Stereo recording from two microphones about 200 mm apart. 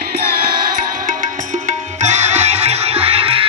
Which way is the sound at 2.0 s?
35° right (ahead or behind).